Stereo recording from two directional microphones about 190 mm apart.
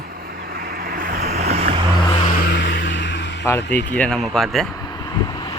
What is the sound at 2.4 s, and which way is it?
Vehicle, 65° left (ahead or behind).